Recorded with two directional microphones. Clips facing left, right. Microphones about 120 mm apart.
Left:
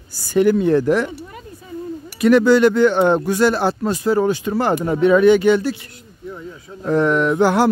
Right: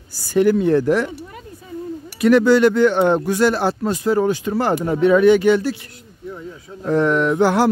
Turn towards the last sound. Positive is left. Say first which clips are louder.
# left 1 dB
turn(degrees=15)  # may be behind; listen again after turning